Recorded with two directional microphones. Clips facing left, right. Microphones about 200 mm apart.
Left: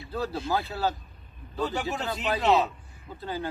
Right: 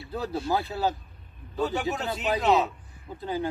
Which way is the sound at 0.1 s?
15° right (ahead or behind).